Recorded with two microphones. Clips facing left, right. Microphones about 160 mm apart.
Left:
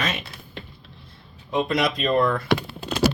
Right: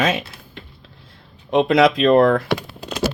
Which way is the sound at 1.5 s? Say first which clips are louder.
Right 8 dB; 70° right (ahead or behind).